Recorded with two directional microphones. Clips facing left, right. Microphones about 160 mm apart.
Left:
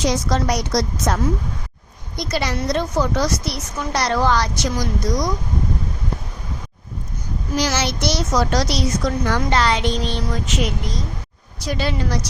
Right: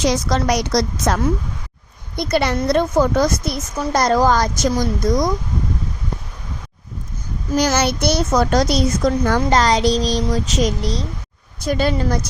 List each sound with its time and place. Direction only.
0.1 s a woman's voice: 90° right
2.1 s a woman's voice: 60° right (ahead or behind)
7.5 s a woman's voice: 50° right (ahead or behind); by 11.0 s 35° right (ahead or behind)
11.6 s a woman's voice: 50° right (ahead or behind)